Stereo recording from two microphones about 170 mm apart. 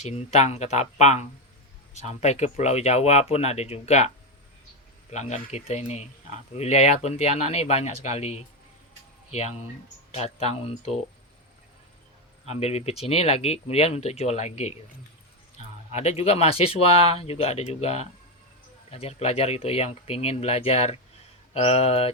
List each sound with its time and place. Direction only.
0.0 s speech: 40° left (ahead or behind)
5.1 s speech: 40° left (ahead or behind)
10.2 s speech: 40° left (ahead or behind)
12.5 s speech: 35° left (ahead or behind)
15.9 s speech: 40° left (ahead or behind)